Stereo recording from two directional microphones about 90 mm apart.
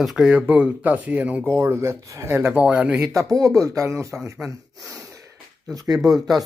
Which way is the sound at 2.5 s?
15° right (ahead or behind).